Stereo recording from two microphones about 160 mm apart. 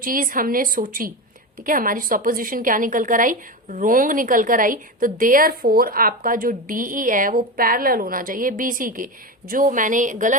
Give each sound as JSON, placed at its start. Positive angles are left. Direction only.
{"t": 0.0, "sound": "a woman's voice", "side_deg": -60}